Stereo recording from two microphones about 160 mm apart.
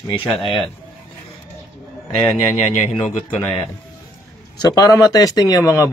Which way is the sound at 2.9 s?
10° left (ahead or behind).